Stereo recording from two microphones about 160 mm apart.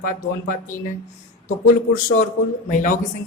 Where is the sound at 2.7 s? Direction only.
50° left (ahead or behind).